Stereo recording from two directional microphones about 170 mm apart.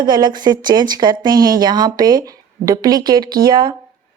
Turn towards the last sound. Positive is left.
turn(degrees=-25)  # may be behind; listen again after turning